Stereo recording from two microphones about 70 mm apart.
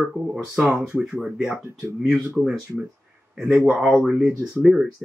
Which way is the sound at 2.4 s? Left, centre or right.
Centre.